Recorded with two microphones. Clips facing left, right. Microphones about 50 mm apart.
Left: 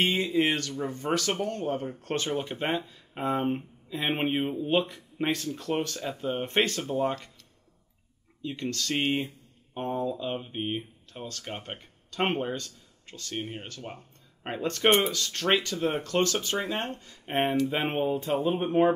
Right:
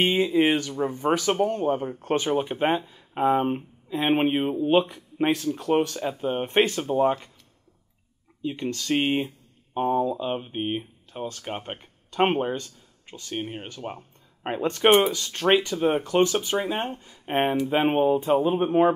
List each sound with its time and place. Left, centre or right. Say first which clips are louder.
0.0 s speech: right 4 dB; centre
8.4 s speech: right 3 dB; centre